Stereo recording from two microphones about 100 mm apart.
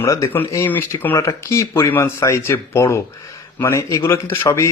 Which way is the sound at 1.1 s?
30° left (ahead or behind).